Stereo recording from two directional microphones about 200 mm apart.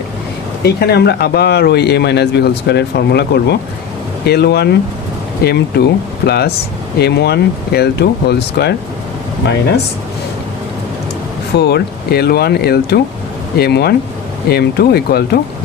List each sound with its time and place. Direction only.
0.6 s speech: 55° left (ahead or behind)
11.5 s speech: 55° left (ahead or behind)